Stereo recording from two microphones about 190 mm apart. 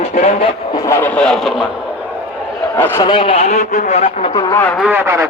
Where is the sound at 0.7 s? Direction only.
15° left (ahead or behind); by 1.7 s centre (ahead or behind).